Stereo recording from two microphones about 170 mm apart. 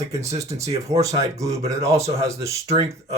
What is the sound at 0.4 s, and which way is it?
Speech, 40° right (ahead or behind).